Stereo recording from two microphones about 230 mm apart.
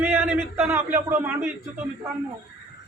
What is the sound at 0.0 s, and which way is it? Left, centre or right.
Speech, centre.